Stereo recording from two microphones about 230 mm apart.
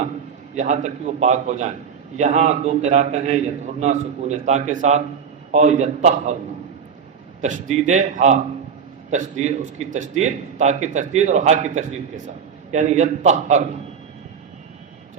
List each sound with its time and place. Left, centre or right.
0.5 s a man's voice: right
7.4 s a man's voice: right